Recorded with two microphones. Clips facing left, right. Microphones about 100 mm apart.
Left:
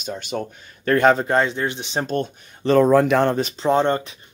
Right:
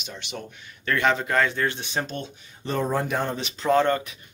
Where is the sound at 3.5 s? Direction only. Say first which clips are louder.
Right 3 dB; 25° left (ahead or behind).